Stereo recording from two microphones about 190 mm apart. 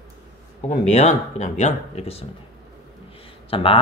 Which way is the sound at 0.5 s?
35° left (ahead or behind).